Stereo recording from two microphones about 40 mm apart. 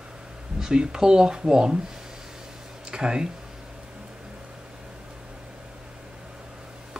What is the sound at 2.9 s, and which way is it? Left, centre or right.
Speech, centre.